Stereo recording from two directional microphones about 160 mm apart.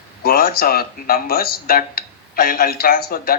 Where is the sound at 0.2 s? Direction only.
70° left (ahead or behind).